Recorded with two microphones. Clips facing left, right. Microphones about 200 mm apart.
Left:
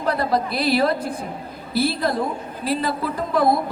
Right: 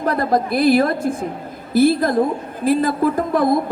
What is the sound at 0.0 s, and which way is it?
Speech, 50° right (ahead or behind).